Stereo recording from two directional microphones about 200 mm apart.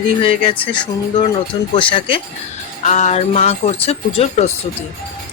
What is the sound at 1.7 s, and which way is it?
Speech, 25° left (ahead or behind).